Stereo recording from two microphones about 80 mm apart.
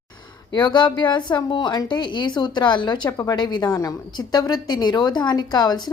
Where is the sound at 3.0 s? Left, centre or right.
Left.